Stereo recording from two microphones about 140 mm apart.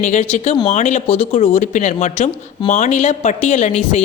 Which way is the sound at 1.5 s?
60° left (ahead or behind).